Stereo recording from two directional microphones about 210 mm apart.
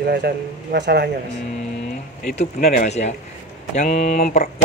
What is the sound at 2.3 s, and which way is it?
Speech, 35° left (ahead or behind).